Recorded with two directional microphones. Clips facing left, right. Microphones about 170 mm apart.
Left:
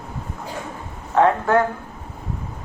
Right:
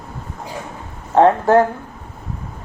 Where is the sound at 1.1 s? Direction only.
30° right (ahead or behind).